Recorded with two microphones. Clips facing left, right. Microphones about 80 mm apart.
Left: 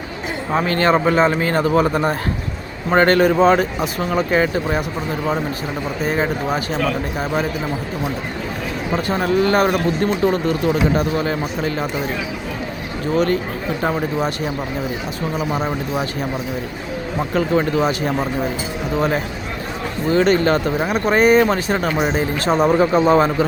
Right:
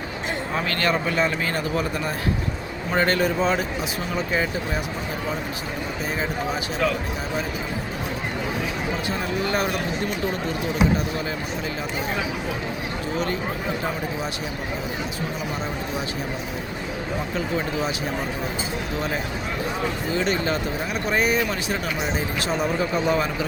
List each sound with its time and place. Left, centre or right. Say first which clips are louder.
0.5 s speech: left 8 dB; left
6.1 s speech: left 7 dB; left
9.0 s a man's voice: left 12 dB; left
13.1 s a man's voice: left 10 dB; left
17.3 s a man's voice: left 10 dB; left
20.1 s speech: left 11 dB; left